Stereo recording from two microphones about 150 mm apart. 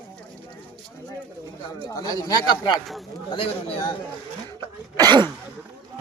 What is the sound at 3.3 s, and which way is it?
Speech, 35° left (ahead or behind).